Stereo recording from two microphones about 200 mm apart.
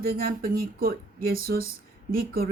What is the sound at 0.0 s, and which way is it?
Speech, 45° right (ahead or behind).